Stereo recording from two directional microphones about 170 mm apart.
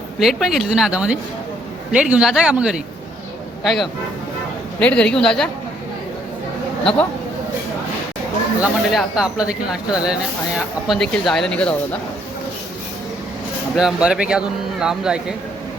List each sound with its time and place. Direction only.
0.2 s speech: centre (ahead or behind)
8.6 s speech: 5° right (ahead or behind)
13.7 s speech: 5° right (ahead or behind)